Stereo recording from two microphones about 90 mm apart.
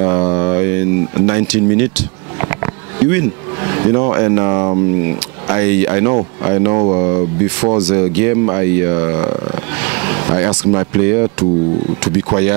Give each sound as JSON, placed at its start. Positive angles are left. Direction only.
{"t": 0.0, "sound": "a sound", "side_deg": -20}
{"t": 3.0, "sound": "speech", "side_deg": -15}
{"t": 5.5, "sound": "speech", "side_deg": -15}
{"t": 6.7, "sound": "speech", "side_deg": -30}
{"t": 7.0, "sound": "speech", "side_deg": -20}